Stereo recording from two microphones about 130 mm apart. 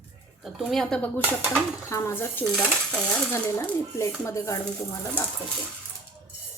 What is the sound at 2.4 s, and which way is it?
Speech, 5° left (ahead or behind).